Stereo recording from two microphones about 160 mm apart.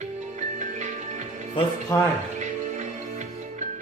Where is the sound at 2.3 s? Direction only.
50° right (ahead or behind).